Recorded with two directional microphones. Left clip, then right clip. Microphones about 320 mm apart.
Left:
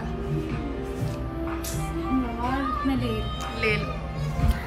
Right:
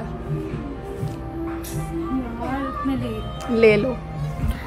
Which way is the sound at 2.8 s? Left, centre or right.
Centre.